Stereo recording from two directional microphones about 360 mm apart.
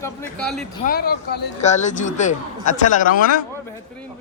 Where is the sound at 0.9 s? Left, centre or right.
Left.